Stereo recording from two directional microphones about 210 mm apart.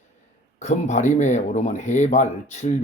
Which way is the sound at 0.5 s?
35° left (ahead or behind).